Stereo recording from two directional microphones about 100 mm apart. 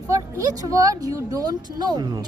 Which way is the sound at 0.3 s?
35° right (ahead or behind).